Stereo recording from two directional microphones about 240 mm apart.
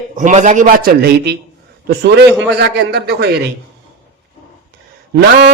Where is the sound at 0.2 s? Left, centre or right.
Right.